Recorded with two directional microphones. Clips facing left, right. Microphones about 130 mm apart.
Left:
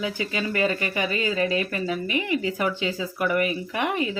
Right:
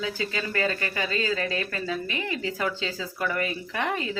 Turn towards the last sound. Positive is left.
turn(degrees=15)  # may be behind; listen again after turning